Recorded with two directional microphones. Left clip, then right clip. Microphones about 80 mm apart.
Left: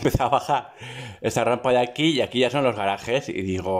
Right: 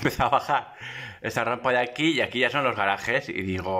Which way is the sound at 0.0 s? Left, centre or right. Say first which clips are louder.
Left 2 dB; left.